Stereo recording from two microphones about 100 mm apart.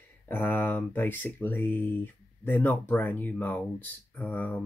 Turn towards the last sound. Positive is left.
turn(degrees=20)  # may be behind; listen again after turning